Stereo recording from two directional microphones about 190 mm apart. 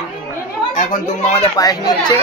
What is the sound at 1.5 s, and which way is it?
Speech, 20° left (ahead or behind).